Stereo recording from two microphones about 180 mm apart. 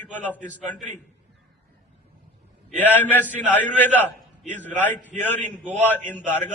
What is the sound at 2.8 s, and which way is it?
A man's voice, 10° left (ahead or behind).